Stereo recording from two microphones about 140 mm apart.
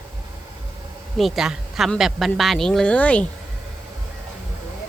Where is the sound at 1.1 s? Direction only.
Centre (ahead or behind).